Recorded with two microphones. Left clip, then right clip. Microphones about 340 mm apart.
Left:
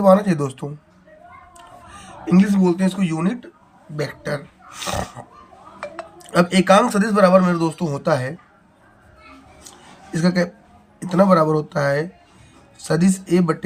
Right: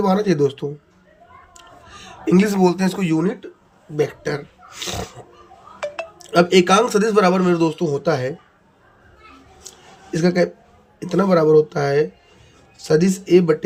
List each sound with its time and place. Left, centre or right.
0.0 s speech: centre
1.5 s a sound: centre
4.2 s speech: centre
6.3 s speech: centre
10.2 s speech: centre